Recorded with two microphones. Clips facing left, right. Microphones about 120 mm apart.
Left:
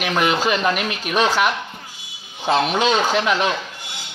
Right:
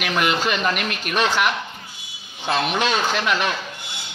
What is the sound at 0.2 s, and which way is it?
Speech, 30° left (ahead or behind).